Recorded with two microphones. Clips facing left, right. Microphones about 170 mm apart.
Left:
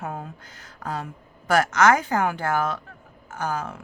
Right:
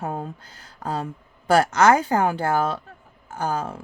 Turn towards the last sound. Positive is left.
turn(degrees=-30)  # may be behind; listen again after turning